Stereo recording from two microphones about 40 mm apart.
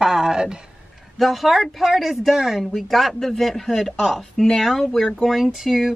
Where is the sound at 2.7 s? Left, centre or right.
Centre.